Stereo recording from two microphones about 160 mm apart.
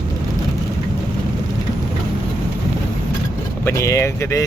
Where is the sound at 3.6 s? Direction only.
20° left (ahead or behind).